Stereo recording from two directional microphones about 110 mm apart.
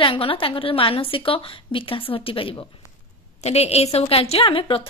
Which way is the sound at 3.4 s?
70° left (ahead or behind).